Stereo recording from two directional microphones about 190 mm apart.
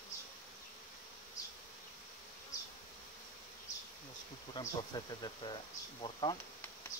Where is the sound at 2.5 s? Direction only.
40° left (ahead or behind).